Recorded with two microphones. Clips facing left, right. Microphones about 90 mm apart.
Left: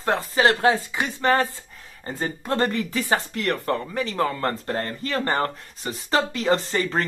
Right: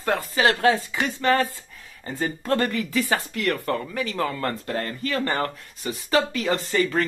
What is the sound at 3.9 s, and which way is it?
Speech, 30° left (ahead or behind).